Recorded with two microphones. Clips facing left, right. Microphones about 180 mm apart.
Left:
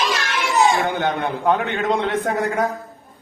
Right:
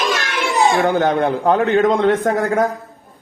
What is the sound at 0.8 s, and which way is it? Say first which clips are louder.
A man's voice: right 6 dB; 45° right (ahead or behind).